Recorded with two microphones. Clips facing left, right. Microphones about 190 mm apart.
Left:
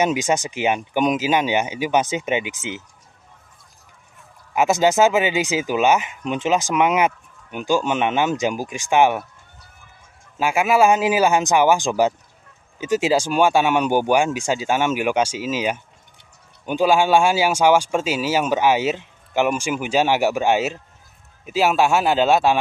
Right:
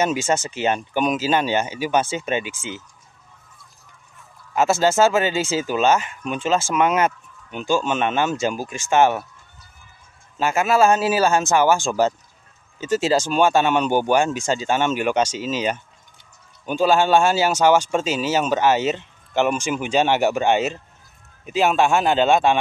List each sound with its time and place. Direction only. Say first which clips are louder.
0.0 s speech: left 1 dB; 15° left (ahead or behind)
4.6 s speech: left 1 dB; 15° left (ahead or behind)
10.4 s speech: left 1 dB; 10° left (ahead or behind)